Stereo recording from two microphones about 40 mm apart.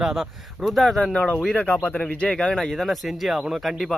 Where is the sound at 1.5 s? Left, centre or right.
Left.